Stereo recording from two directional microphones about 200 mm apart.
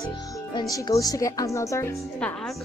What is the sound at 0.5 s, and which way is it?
Music, 20° left (ahead or behind).